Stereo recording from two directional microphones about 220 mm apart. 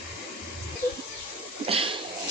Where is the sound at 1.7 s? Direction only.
25° right (ahead or behind).